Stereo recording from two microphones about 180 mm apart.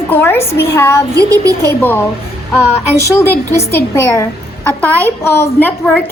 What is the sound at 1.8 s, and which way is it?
A woman's voice, 10° left (ahead or behind).